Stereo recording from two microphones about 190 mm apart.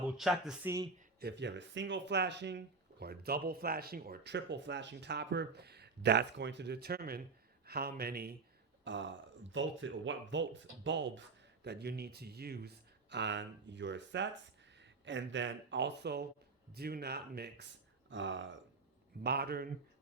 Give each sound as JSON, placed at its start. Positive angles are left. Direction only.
{"t": 0.2, "sound": "speech", "side_deg": -5}
{"t": 1.2, "sound": "speech", "side_deg": -65}
{"t": 8.8, "sound": "speech", "side_deg": -75}
{"t": 11.6, "sound": "speech", "side_deg": -60}
{"t": 18.1, "sound": "speech", "side_deg": -80}
{"t": 19.2, "sound": "speech", "side_deg": -60}